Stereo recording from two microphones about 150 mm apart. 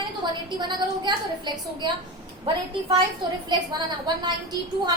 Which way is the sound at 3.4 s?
30° right (ahead or behind).